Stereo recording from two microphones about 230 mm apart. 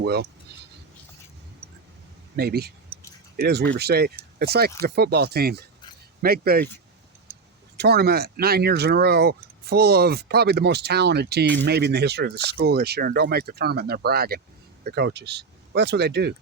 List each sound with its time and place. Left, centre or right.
0.0 s speech: right
2.3 s speech: right
7.8 s speech: right